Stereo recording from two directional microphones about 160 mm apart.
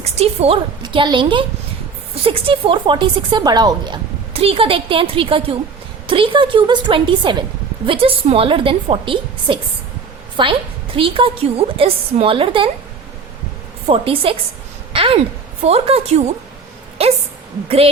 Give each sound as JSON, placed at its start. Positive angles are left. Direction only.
{"t": 0.0, "sound": "speech", "side_deg": -40}
{"t": 13.8, "sound": "speech", "side_deg": -35}
{"t": 14.9, "sound": "a sound", "side_deg": -35}
{"t": 15.6, "sound": "speech", "side_deg": -40}